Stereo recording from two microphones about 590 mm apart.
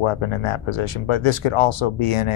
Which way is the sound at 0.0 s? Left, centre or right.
Left.